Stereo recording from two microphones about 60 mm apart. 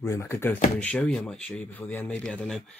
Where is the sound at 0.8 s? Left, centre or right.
Left.